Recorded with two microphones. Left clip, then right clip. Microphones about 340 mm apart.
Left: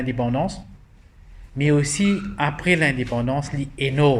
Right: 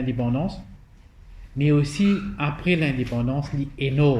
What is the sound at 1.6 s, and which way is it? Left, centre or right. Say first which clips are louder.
A man's voice: left 2 dB; left.